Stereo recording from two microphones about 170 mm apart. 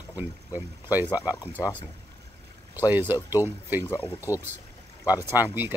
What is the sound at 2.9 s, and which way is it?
Speech, 10° right (ahead or behind).